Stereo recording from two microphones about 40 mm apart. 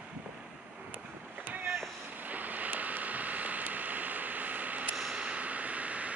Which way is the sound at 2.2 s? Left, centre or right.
Right.